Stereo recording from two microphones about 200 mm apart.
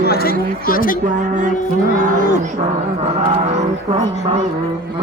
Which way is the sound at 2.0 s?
45° right (ahead or behind).